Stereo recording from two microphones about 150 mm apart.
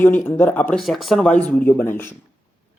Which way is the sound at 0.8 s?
Centre (ahead or behind).